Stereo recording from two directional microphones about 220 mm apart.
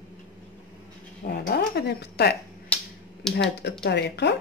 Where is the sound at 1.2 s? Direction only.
45° left (ahead or behind).